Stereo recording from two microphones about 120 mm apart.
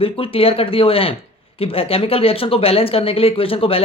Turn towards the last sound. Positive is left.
turn(degrees=50)  # may be behind; listen again after turning